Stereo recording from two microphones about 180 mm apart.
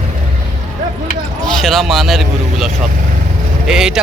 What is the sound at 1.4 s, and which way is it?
Speech, centre (ahead or behind).